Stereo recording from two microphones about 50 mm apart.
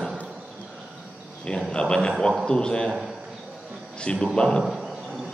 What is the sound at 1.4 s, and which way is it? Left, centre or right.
Speech, centre.